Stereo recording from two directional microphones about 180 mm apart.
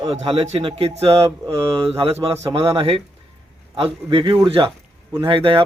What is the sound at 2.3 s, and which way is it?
Speech, 15° right (ahead or behind).